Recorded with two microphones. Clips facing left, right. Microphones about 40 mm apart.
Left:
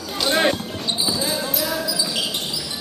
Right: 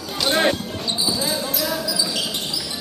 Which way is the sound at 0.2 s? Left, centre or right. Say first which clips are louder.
Even; centre.